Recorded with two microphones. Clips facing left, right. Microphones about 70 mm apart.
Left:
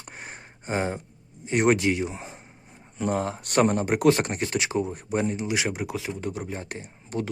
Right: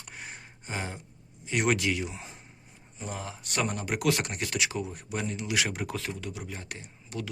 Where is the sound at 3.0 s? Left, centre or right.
Left; by 6.1 s centre.